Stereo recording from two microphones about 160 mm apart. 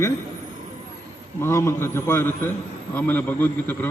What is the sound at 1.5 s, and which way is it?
A man's voice, 15° left (ahead or behind).